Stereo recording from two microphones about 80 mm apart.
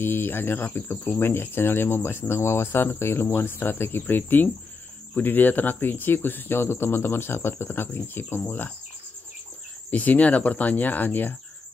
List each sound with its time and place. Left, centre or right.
0.0 s speech: left
9.8 s speech: centre